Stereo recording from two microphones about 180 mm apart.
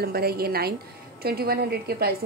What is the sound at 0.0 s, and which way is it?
A woman's voice, 60° right (ahead or behind).